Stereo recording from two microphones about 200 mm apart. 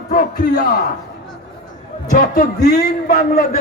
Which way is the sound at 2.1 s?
45° left (ahead or behind).